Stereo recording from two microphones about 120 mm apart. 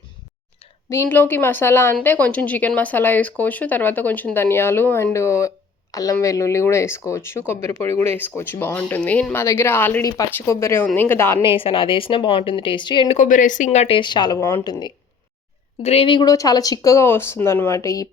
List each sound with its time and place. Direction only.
0.9 s speech: 20° left (ahead or behind)
9.3 s speech: 20° left (ahead or behind)
10.0 s a woman's voice: 30° left (ahead or behind)
11.4 s speech: 45° left (ahead or behind)
13.1 s a woman's voice: 90° left; by 13.9 s 70° left (ahead or behind)
13.9 s a woman's voice: 40° left (ahead or behind)
15.8 s speech: 60° left (ahead or behind)
16.0 s a woman's voice: 40° left (ahead or behind)
16.3 s speech: 30° left (ahead or behind)